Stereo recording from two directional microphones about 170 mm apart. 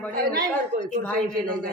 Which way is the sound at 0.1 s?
60° right (ahead or behind).